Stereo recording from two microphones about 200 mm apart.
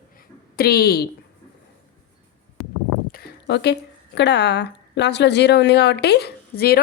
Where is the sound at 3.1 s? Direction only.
55° left (ahead or behind).